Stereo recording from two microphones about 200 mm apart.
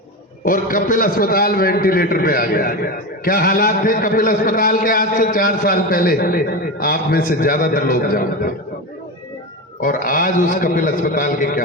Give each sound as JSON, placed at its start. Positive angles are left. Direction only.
{"t": 0.4, "sound": "a man's voice", "side_deg": 45}
{"t": 9.8, "sound": "a man's voice", "side_deg": 45}